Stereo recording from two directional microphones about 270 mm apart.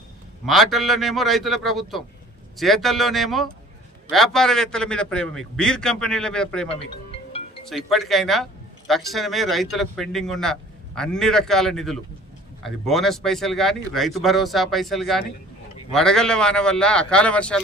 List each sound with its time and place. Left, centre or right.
0.4 s speech: centre
6.7 s music: left
7.7 s speech: centre